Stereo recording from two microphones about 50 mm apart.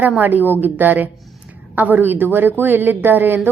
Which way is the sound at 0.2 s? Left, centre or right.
Right.